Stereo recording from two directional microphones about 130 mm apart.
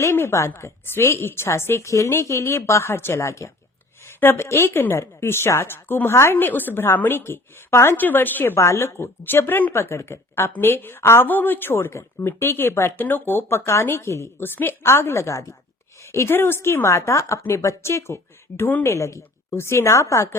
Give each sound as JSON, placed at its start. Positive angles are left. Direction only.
{"t": 0.0, "sound": "a woman's voice", "side_deg": 20}